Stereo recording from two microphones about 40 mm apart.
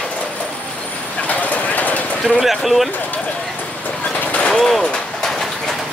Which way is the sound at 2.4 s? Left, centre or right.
Centre.